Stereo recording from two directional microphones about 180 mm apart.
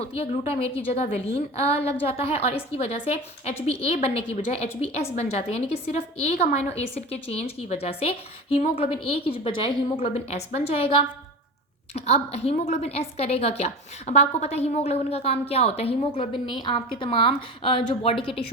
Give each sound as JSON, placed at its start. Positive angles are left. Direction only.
{"t": 0.0, "sound": "a woman's voice", "side_deg": 35}